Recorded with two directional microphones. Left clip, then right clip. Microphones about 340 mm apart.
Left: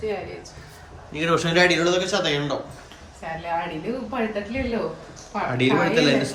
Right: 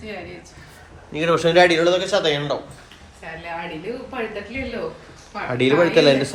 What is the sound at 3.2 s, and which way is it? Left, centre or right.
Speech, left.